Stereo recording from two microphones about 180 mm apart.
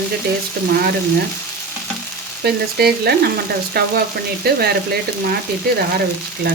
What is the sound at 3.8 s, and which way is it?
A woman's voice, 60° right (ahead or behind).